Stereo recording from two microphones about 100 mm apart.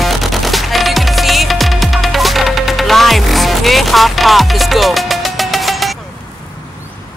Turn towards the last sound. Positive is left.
turn(degrees=0)  # may be behind; listen again after turning